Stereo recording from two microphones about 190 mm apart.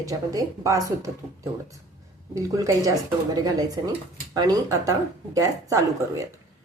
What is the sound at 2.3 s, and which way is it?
Speech, 15° right (ahead or behind).